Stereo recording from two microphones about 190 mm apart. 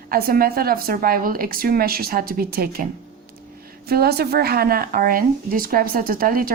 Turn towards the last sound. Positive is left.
turn(degrees=-50)  # may be behind; listen again after turning